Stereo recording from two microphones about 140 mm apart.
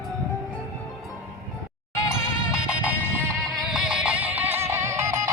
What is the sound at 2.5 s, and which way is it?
Music, 10° right (ahead or behind).